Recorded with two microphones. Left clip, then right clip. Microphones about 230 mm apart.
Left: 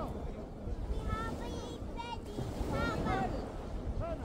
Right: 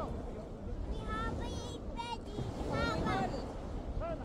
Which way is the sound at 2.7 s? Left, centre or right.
Right.